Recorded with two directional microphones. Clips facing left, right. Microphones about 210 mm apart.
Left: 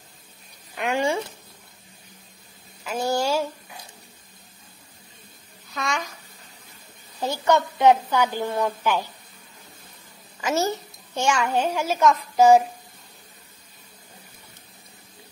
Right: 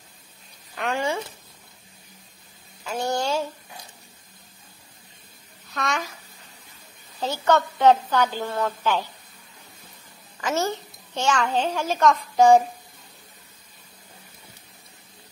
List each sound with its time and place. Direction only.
0.7 s a sound: 15° left (ahead or behind)
2.8 s speech: 5° left (ahead or behind)
5.7 s a child's voice: centre (ahead or behind)
7.2 s a child's voice: 10° left (ahead or behind)
10.4 s a child's voice: 10° left (ahead or behind)